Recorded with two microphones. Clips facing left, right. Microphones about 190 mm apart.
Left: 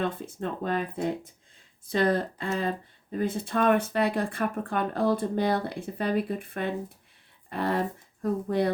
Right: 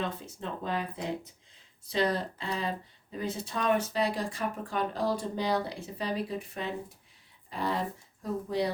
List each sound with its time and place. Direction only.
0.0 s speech: 55° left (ahead or behind)